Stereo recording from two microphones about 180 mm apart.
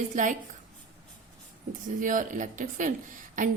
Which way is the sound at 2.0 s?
45° right (ahead or behind).